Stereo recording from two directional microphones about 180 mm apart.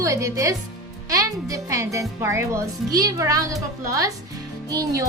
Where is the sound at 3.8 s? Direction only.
20° right (ahead or behind).